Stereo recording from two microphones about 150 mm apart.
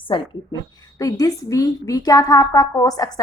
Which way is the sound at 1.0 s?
25° left (ahead or behind).